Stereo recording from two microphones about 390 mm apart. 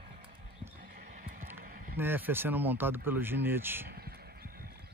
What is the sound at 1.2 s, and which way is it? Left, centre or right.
Music, right.